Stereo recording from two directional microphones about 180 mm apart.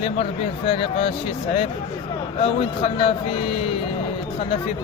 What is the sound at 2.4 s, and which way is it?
Speech, 30° left (ahead or behind).